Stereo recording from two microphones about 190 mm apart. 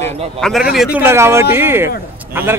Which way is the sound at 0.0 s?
Centre (ahead or behind).